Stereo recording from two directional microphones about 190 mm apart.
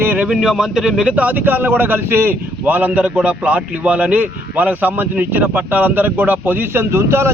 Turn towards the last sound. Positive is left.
turn(degrees=-15)  # may be behind; listen again after turning